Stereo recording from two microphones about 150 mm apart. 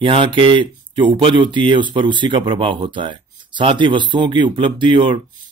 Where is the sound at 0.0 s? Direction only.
35° right (ahead or behind).